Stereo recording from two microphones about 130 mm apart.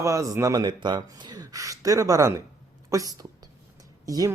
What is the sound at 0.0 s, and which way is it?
Speech, 25° right (ahead or behind).